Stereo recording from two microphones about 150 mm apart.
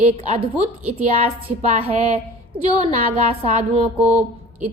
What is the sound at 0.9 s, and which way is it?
A woman's voice, 50° right (ahead or behind).